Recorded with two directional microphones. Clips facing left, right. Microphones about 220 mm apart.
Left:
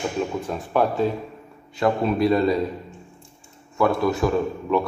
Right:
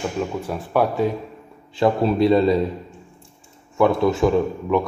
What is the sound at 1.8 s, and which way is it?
Speech, 30° right (ahead or behind).